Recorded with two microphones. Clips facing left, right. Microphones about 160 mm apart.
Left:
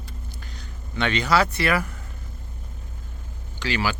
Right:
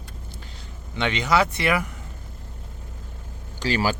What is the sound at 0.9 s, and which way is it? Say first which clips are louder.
Speech: even; 20° right (ahead or behind).